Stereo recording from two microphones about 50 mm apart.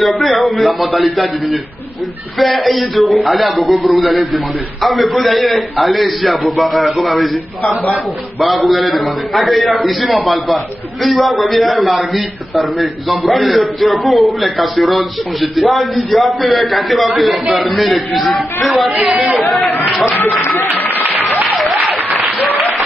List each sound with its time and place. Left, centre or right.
0.0 s a man's voice: centre
8.4 s a man's voice: centre
20.2 s speech: left
20.9 s applause: right
21.5 s applause: centre